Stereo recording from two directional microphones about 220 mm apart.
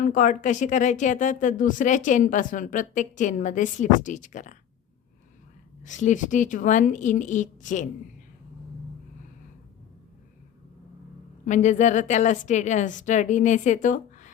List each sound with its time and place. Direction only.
0.0 s speech: 35° left (ahead or behind)
5.8 s speech: 35° left (ahead or behind)
11.4 s speech: 35° left (ahead or behind)